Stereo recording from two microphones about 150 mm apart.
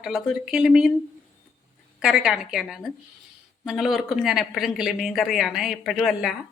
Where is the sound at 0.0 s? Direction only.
5° right (ahead or behind).